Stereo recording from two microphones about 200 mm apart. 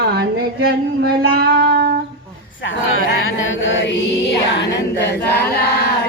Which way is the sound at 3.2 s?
70° left (ahead or behind).